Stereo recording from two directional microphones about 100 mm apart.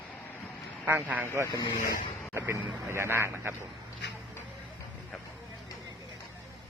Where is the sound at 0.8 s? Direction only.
15° right (ahead or behind).